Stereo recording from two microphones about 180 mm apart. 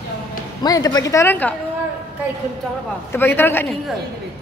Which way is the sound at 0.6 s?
20° left (ahead or behind).